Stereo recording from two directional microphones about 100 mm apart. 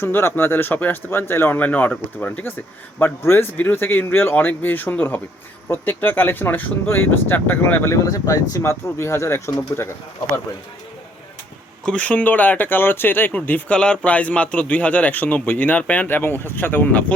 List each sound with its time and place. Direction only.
0.0 s speech: 25° left (ahead or behind)
8.1 s speech: 35° left (ahead or behind)
11.9 s speech: 15° left (ahead or behind)